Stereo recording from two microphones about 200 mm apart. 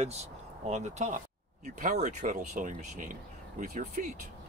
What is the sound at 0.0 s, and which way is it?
Speech, 35° right (ahead or behind).